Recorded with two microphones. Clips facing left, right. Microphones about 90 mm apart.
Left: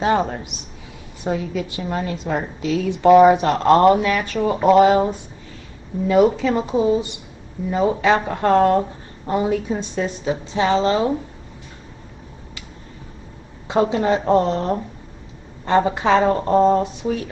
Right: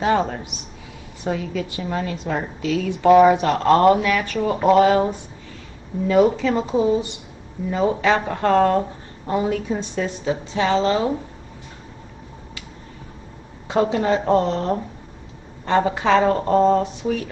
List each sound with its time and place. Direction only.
0.0 s a woman's voice: 15° left (ahead or behind)
4.4 s a woman's voice: 10° left (ahead or behind)
6.0 s a woman's voice: 15° left (ahead or behind)
8.0 s a woman's voice: 15° left (ahead or behind)
13.7 s a woman's voice: 15° left (ahead or behind)